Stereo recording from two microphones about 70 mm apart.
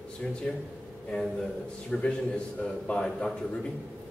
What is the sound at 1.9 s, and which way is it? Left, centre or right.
A man's voice, centre.